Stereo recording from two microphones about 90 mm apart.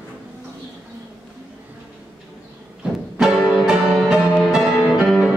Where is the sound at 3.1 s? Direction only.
5° right (ahead or behind).